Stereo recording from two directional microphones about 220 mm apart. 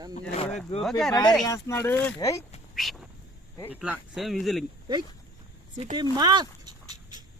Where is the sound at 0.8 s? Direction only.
Centre (ahead or behind).